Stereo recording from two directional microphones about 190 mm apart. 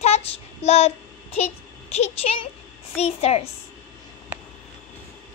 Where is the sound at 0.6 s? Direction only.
35° left (ahead or behind).